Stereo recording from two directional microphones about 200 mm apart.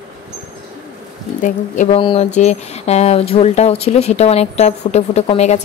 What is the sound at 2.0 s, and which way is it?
Speech, 25° left (ahead or behind).